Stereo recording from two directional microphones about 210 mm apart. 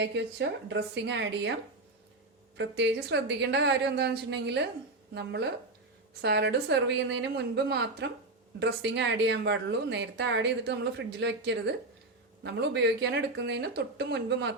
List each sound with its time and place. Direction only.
0.0 s a woman's voice: 55° right (ahead or behind)
2.6 s a woman's voice: 55° right (ahead or behind)